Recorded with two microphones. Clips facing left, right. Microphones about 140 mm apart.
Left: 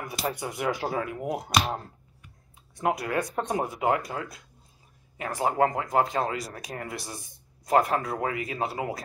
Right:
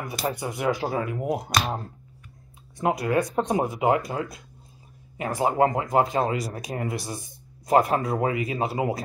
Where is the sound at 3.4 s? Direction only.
15° right (ahead or behind).